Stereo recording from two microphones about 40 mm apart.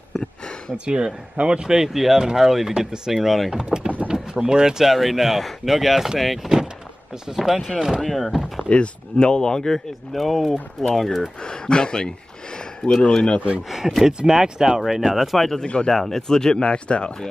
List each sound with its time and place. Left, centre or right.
0.8 s a man's voice: right
1.7 s speech: centre
3.1 s speech: centre
3.5 s speech: right
4.8 s speech: centre
8.6 s speech: left
10.1 s speech: centre
11.4 s speech: left
13.1 s speech: left
13.7 s speech: centre
15.3 s speech: centre
15.6 s speech: left
15.9 s speech: centre; by 17.1 s left